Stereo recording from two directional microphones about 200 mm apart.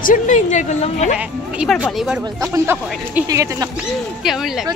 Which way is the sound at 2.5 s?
10° right (ahead or behind).